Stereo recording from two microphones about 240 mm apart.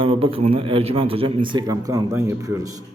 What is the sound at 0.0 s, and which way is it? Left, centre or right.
A man's voice, right.